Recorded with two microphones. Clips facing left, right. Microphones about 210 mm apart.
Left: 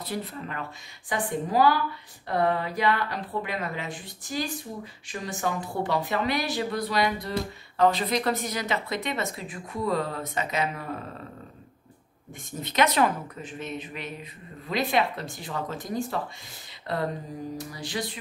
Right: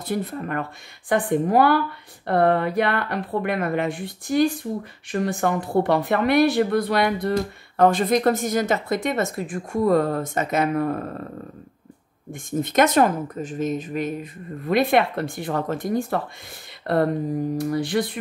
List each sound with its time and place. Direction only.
0.0 s speech: 50° right (ahead or behind)
12.3 s speech: 50° right (ahead or behind)
16.8 s a sound: 55° right (ahead or behind)
17.6 s speech: 55° right (ahead or behind)